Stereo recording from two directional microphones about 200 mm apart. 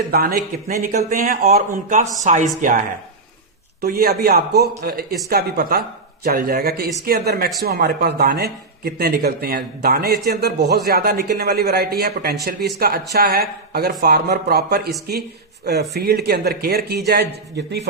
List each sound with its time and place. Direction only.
0.1 s speech: 50° right (ahead or behind)